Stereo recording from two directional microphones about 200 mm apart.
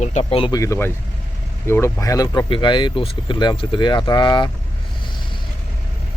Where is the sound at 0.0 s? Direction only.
35° left (ahead or behind).